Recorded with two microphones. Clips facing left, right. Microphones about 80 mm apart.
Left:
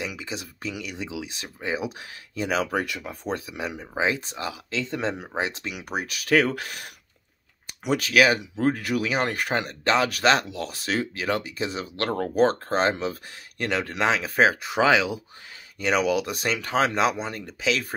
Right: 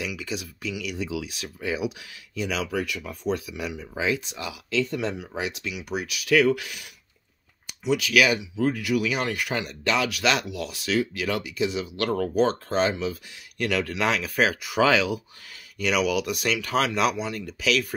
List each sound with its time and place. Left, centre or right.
0.0 s speech: left
13.7 s speech: left